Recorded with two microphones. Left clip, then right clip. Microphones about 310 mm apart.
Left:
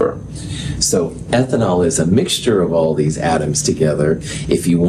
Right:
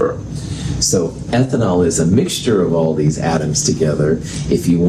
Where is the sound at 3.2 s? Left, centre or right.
Left.